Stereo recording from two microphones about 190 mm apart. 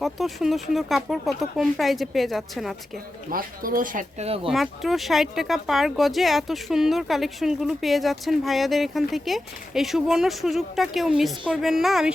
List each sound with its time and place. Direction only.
0.0 s speech: centre (ahead or behind)
3.2 s speech: 50° right (ahead or behind)
4.4 s speech: centre (ahead or behind)